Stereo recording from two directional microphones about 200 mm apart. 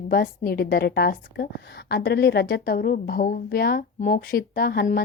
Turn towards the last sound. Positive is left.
turn(degrees=50)  # may be behind; listen again after turning